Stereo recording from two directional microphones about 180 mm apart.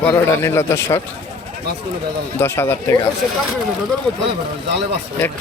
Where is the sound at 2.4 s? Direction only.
15° left (ahead or behind).